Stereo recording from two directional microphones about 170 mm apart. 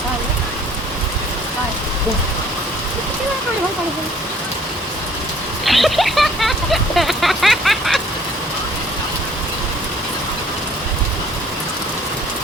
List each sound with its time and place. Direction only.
5.6 s speech: centre (ahead or behind)